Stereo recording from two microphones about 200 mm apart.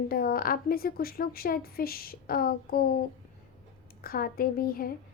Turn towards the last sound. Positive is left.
turn(degrees=45)  # may be behind; listen again after turning